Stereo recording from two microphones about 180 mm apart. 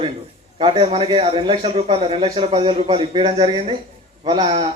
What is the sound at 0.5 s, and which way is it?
Speech, 30° right (ahead or behind).